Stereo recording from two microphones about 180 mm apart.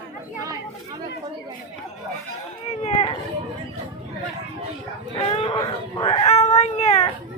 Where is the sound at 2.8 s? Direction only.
35° left (ahead or behind).